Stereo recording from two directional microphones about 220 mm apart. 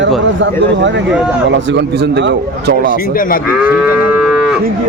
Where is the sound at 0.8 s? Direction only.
55° right (ahead or behind).